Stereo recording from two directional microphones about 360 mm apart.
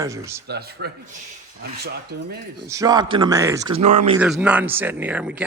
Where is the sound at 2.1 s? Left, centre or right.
Right.